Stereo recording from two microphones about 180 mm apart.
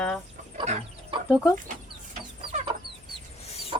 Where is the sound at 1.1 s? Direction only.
30° right (ahead or behind).